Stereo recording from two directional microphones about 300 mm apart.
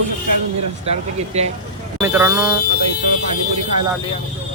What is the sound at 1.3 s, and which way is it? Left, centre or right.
Speech, right.